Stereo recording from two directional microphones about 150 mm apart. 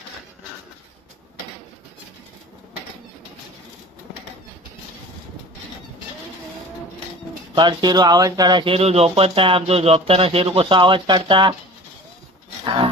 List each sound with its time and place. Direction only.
7.5 s speech: 30° right (ahead or behind)
12.6 s roaring cats: 30° right (ahead or behind)